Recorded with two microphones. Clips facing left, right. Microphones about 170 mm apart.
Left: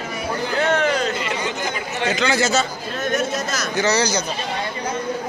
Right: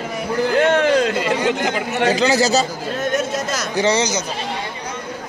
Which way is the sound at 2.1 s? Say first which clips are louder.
Right 3 dB; 35° right (ahead or behind).